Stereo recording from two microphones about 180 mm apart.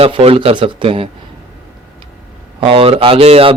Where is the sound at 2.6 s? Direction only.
30° right (ahead or behind).